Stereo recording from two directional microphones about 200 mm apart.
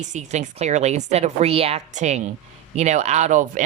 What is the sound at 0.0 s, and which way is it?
Speech, 35° right (ahead or behind).